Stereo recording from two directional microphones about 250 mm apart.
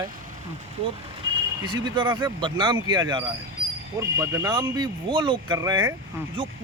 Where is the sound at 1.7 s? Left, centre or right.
Centre.